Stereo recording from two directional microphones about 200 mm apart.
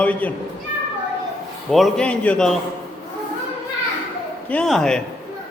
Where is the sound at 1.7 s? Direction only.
Centre (ahead or behind).